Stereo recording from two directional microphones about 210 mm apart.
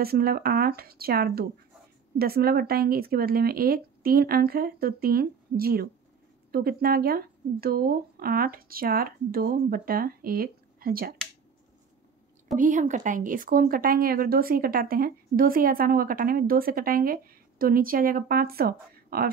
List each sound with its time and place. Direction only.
0.0 s speech: 45° right (ahead or behind)
12.5 s speech: 35° right (ahead or behind)